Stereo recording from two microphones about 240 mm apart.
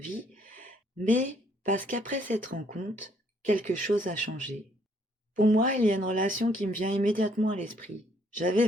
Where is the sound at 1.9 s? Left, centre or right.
Right.